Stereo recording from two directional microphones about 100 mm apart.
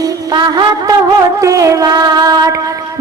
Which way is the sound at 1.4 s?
35° right (ahead or behind).